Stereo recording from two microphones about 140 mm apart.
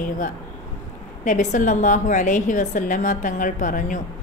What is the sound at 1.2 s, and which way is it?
A woman's voice, 60° left (ahead or behind).